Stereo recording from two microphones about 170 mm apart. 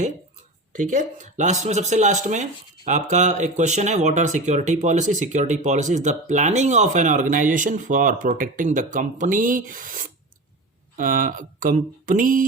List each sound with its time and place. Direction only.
0.7 s speech: 50° right (ahead or behind)